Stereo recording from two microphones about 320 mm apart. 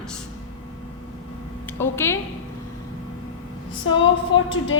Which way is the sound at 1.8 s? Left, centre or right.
Centre.